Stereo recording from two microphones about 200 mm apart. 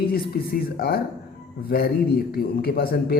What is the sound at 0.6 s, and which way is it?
A man's voice, 50° left (ahead or behind).